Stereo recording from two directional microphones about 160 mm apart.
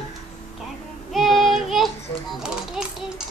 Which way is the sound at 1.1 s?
Centre (ahead or behind).